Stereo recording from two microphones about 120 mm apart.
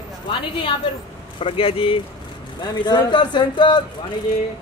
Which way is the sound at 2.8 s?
40° left (ahead or behind).